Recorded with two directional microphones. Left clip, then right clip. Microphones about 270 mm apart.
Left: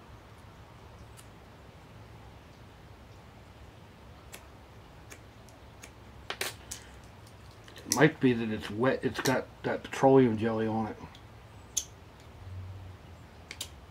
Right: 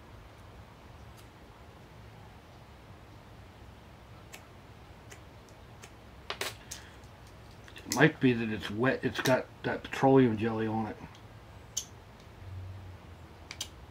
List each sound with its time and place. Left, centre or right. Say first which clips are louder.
5.8 s tick-tock: left 1 dB; centre
7.9 s speech: left 1 dB; centre